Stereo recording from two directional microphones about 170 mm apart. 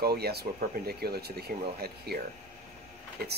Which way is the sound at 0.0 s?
70° right (ahead or behind).